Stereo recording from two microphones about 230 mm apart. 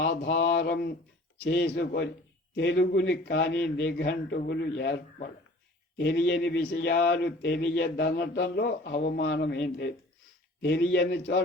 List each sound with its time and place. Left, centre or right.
0.0 s speech: left